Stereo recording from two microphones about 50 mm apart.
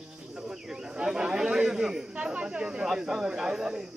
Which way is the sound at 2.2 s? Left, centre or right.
Centre.